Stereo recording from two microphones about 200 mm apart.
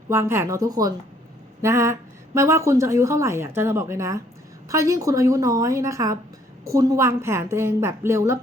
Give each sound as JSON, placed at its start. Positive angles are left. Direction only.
{"t": 0.1, "sound": "a woman's voice", "side_deg": -10}